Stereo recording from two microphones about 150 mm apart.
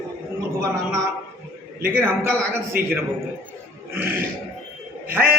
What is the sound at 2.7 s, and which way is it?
Speech, 75° right (ahead or behind).